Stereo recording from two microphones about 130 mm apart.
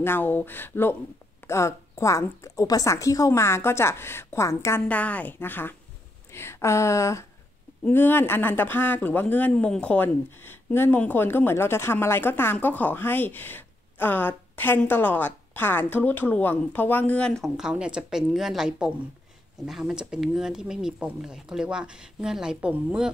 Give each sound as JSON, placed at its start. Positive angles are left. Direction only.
{"t": 0.0, "sound": "a woman's voice", "side_deg": 15}
{"t": 4.8, "sound": "a woman's voice", "side_deg": 10}